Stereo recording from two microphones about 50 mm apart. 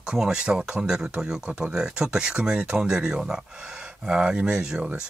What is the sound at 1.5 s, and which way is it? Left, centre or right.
Speech, right.